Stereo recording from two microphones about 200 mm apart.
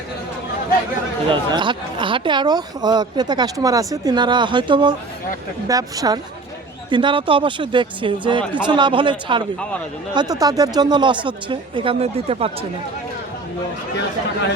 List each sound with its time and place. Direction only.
1.3 s speech: 25° right (ahead or behind)